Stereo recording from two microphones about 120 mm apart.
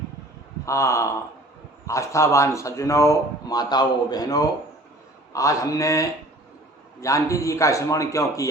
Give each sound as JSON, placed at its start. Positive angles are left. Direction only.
{"t": 0.6, "sound": "speech", "side_deg": 25}